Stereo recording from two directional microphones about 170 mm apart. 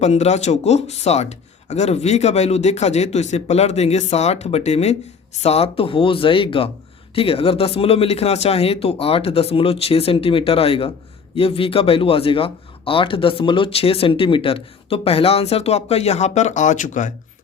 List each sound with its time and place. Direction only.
0.0 s speech: 40° left (ahead or behind)